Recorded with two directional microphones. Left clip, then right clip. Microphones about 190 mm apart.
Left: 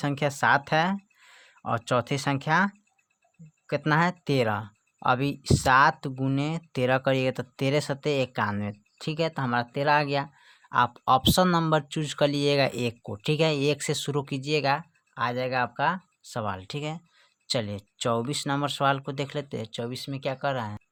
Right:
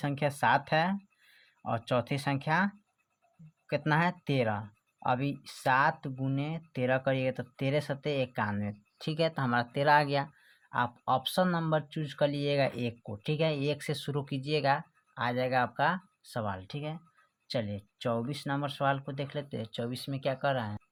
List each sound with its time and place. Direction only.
0.0 s speech: 30° left (ahead or behind)